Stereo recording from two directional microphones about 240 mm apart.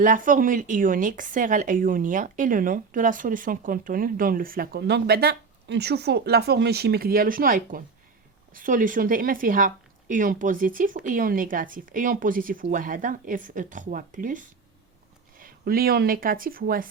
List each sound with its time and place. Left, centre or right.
0.0 s speech: right